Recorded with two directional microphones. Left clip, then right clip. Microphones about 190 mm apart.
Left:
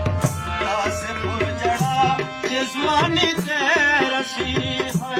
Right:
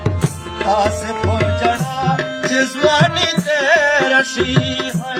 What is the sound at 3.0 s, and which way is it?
Music, 55° right (ahead or behind).